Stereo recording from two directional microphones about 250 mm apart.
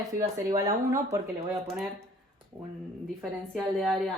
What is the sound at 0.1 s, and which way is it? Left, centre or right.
Speech, centre.